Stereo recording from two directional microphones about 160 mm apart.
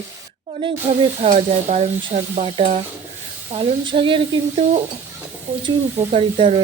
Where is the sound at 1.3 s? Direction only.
45° right (ahead or behind).